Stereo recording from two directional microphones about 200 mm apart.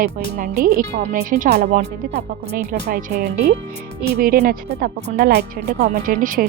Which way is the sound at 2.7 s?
60° right (ahead or behind).